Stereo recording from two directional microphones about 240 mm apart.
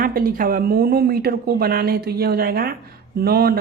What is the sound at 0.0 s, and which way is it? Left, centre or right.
A woman's voice, right.